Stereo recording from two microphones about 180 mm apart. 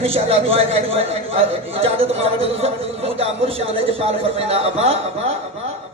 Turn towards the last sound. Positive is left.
turn(degrees=-35)  # may be behind; listen again after turning